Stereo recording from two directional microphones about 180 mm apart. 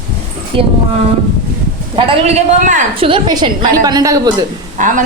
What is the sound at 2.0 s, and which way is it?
Speech, 30° right (ahead or behind).